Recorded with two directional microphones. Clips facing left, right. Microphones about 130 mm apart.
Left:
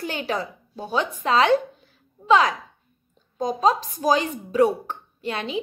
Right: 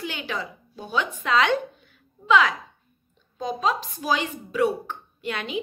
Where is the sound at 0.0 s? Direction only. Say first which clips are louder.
Left 4 dB; 40° left (ahead or behind).